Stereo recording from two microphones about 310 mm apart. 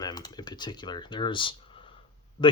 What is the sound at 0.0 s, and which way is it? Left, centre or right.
Speech, centre.